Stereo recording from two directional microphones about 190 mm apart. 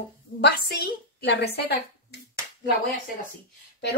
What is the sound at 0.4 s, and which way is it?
A woman's voice, 60° left (ahead or behind).